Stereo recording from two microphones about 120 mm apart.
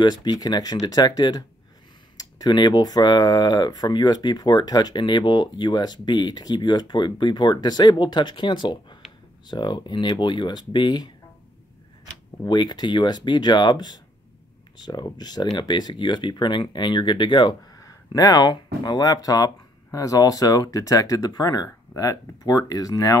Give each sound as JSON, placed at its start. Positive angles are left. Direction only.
{"t": 0.0, "sound": "speech", "side_deg": 35}
{"t": 12.4, "sound": "speech", "side_deg": 35}
{"t": 17.7, "sound": "speech", "side_deg": 30}